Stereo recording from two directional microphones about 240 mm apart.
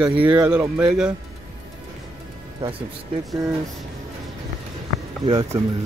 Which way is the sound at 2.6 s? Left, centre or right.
Right.